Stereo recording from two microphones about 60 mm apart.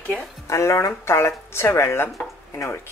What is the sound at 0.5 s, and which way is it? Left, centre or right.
Speech, left.